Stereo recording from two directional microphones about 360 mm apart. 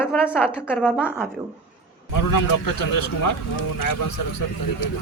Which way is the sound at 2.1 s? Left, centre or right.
Left.